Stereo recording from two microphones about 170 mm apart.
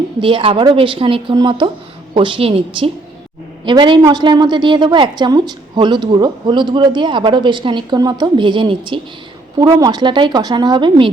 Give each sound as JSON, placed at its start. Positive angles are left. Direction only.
{"t": 0.2, "sound": "a woman's voice", "side_deg": -30}